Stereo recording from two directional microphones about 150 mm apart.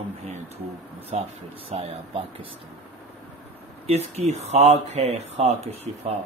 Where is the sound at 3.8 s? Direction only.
45° right (ahead or behind).